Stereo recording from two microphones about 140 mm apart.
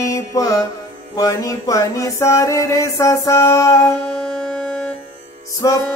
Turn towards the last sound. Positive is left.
turn(degrees=25)  # may be behind; listen again after turning